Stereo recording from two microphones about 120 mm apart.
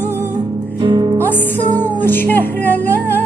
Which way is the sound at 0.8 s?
35° right (ahead or behind).